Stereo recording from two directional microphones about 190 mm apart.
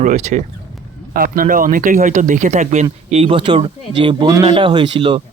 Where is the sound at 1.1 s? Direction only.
50° right (ahead or behind).